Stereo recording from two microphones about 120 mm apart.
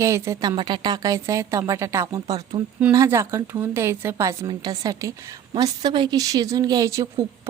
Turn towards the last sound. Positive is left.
turn(degrees=-25)  # may be behind; listen again after turning